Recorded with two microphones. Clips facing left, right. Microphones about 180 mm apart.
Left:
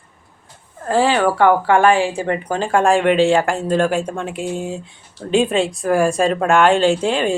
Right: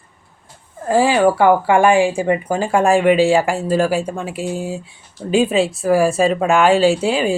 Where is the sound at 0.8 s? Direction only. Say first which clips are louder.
Right 2 dB; 10° right (ahead or behind).